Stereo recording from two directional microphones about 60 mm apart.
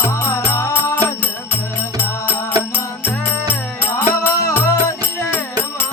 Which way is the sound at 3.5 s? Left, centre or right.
Left.